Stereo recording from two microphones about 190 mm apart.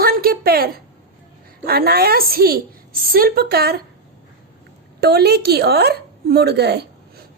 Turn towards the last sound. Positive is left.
turn(degrees=-60)  # may be behind; listen again after turning